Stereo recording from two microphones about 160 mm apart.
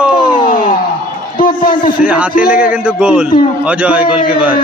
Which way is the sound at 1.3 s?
60° left (ahead or behind).